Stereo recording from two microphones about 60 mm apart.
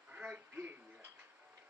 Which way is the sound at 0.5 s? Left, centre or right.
Right.